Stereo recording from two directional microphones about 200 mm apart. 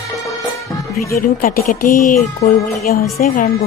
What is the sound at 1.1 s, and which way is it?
A woman's voice, 45° left (ahead or behind).